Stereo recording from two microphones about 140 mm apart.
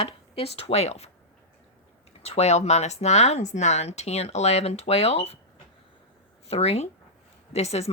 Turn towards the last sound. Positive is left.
turn(degrees=50)  # may be behind; listen again after turning